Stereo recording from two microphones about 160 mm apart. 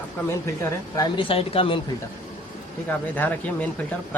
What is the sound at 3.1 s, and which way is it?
Speech, 10° left (ahead or behind).